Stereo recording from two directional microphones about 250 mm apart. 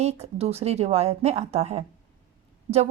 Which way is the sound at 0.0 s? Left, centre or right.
Right.